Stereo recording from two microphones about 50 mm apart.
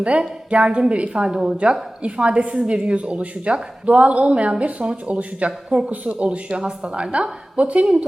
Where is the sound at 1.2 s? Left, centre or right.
Centre.